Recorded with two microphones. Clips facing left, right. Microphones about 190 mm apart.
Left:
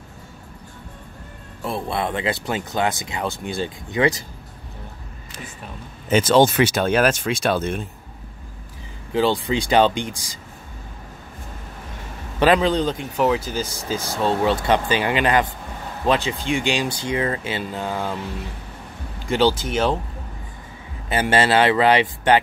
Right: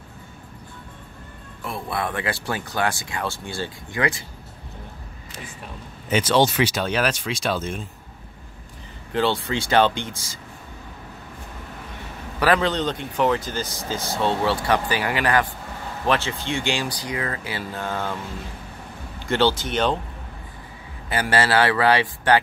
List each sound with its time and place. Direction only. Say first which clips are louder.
1.6 s speech: left 3 dB; 25° left (ahead or behind)
6.0 s speech: left 4 dB; 45° left (ahead or behind)
9.1 s speech: left 3 dB; 15° left (ahead or behind)
12.4 s a man's voice: left 3 dB; 20° left (ahead or behind)
12.6 s speech: left 3 dB; 10° left (ahead or behind)
19.2 s speech: left 2 dB; 15° left (ahead or behind)
21.1 s speech: left 3 dB; 20° left (ahead or behind)